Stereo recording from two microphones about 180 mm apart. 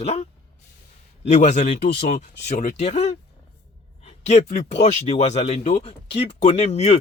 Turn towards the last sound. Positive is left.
turn(degrees=35)  # may be behind; listen again after turning